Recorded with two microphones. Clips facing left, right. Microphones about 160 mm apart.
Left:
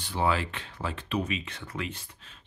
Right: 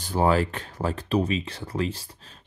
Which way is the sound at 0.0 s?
45° right (ahead or behind).